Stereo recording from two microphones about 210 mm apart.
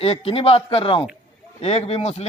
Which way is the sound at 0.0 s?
25° left (ahead or behind).